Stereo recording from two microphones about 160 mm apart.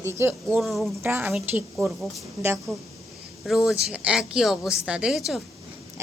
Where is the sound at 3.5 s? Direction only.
Centre (ahead or behind).